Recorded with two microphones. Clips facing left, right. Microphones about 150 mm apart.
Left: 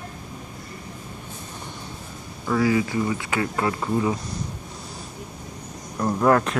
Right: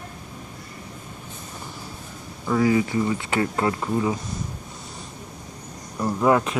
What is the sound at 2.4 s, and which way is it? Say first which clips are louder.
Speech: right 1 dB; 25° right (ahead or behind).